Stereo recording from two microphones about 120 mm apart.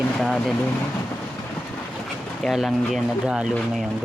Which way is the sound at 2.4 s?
Centre (ahead or behind).